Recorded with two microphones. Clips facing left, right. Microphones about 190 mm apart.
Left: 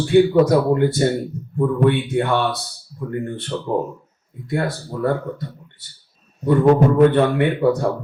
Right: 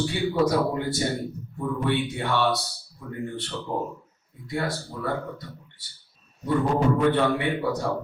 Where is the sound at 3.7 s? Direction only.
50° left (ahead or behind).